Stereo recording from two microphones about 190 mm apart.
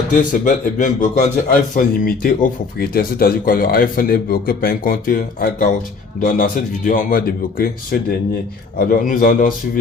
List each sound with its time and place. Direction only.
0.1 s a man's voice: 45° left (ahead or behind)